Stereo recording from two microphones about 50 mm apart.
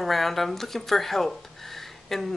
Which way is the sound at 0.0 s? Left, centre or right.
Centre.